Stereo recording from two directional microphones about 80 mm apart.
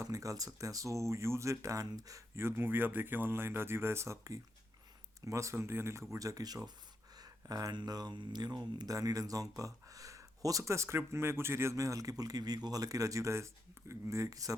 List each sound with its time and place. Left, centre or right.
0.0 s speech: right
2.3 s speech: right
7.2 s a sound: right
7.8 s speech: right